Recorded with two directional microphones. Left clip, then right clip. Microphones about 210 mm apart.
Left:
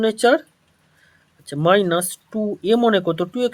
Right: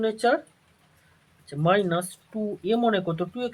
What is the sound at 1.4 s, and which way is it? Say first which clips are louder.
Speech: left 6 dB; 50° left (ahead or behind).